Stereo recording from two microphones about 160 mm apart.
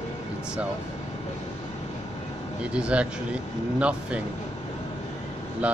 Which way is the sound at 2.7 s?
5° right (ahead or behind).